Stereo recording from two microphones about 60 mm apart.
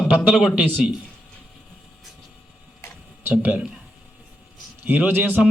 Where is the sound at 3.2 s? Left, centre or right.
Right.